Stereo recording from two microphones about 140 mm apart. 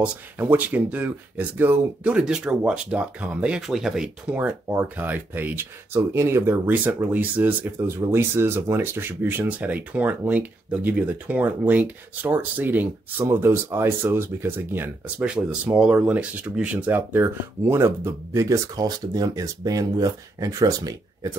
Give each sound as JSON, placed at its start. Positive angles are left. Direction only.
{"t": 0.0, "sound": "speech", "side_deg": -10}